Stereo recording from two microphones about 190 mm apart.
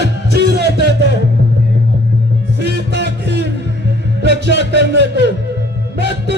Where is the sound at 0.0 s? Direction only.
60° right (ahead or behind).